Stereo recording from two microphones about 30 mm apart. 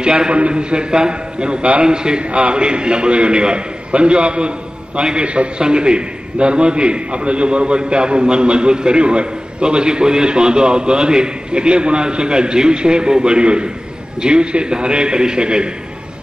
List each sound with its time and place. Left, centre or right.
0.0 s a man's voice: right
2.2 s a man's voice: right
5.6 s a man's voice: right